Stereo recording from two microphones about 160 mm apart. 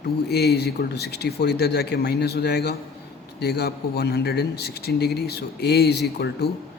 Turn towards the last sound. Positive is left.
turn(degrees=90)